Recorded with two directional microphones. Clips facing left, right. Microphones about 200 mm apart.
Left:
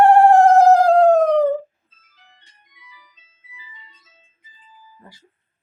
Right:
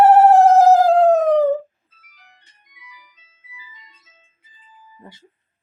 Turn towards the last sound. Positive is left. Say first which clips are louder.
# right 4 dB
turn(degrees=-20)  # may be behind; listen again after turning